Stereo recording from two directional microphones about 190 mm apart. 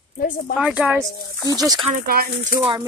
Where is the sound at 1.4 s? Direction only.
20° right (ahead or behind).